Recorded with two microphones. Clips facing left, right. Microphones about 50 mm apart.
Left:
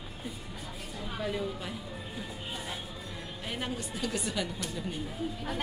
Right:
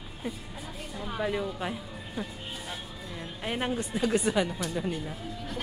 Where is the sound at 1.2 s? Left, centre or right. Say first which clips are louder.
Right 4 dB; right.